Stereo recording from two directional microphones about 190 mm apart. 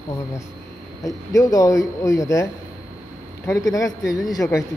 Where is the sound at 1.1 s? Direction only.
20° left (ahead or behind).